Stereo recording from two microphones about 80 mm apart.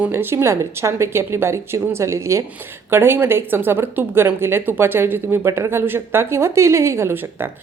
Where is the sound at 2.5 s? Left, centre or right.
Right.